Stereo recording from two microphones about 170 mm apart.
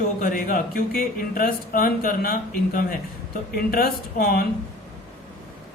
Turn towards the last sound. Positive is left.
turn(degrees=60)  # may be behind; listen again after turning